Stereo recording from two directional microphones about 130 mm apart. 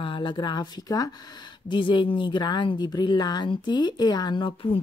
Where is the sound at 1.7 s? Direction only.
40° left (ahead or behind).